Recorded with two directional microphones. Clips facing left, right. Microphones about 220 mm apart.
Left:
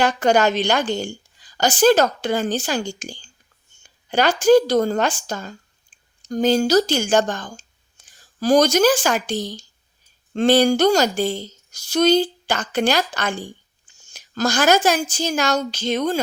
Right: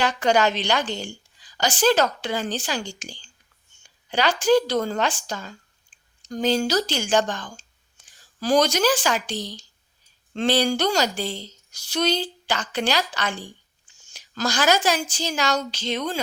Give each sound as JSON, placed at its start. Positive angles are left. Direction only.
{"t": 0.0, "sound": "a woman's voice", "side_deg": 45}